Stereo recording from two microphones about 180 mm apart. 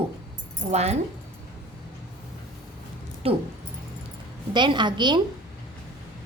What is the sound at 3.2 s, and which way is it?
Speech, 35° right (ahead or behind).